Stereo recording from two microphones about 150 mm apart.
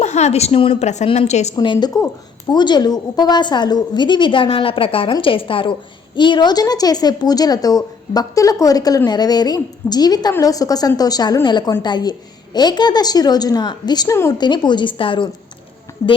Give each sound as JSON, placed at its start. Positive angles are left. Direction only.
{"t": 0.0, "sound": "a woman's voice", "side_deg": 50}
{"t": 1.5, "sound": "a woman's voice", "side_deg": 30}